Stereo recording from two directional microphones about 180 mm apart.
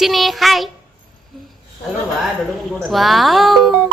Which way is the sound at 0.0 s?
Centre (ahead or behind).